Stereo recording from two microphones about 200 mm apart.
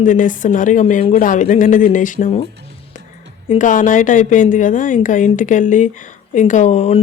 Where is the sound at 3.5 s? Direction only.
40° left (ahead or behind).